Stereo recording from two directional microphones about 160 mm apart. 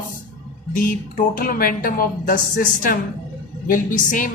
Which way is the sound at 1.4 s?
65° left (ahead or behind).